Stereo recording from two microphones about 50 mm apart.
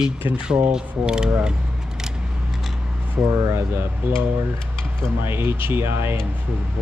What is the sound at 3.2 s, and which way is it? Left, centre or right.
Speech, right.